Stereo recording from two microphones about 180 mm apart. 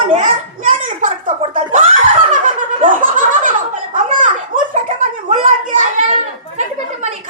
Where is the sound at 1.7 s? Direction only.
45° right (ahead or behind).